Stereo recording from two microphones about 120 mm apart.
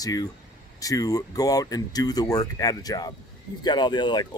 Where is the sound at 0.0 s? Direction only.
30° left (ahead or behind).